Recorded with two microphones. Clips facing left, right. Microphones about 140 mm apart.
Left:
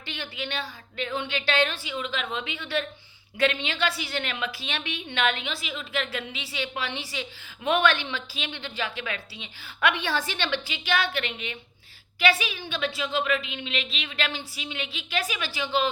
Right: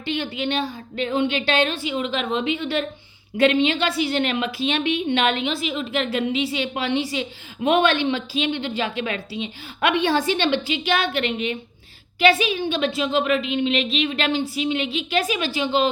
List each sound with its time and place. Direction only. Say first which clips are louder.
0.0 s a woman's voice: right 10 dB; 20° right (ahead or behind)